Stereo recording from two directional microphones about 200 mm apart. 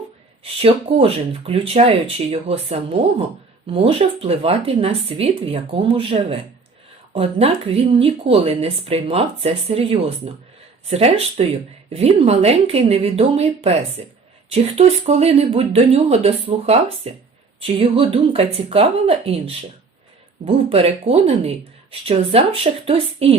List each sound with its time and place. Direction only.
0.6 s speech: 30° right (ahead or behind)